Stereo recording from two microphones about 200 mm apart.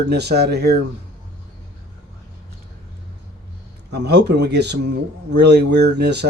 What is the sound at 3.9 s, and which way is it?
Speech, 55° right (ahead or behind).